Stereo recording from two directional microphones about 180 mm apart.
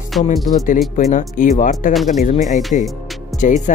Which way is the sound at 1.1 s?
45° left (ahead or behind).